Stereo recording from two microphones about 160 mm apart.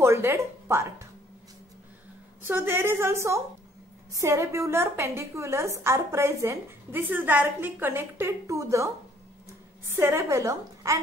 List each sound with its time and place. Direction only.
0.0 s speech: 15° right (ahead or behind)
2.4 s a woman's voice: 15° right (ahead or behind)
9.8 s a woman's voice: 15° right (ahead or behind)